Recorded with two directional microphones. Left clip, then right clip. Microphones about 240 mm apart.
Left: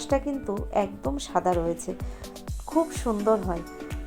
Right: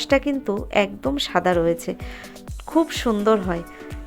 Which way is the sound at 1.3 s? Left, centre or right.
Right.